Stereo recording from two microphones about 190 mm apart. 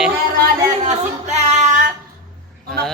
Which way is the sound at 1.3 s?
35° right (ahead or behind).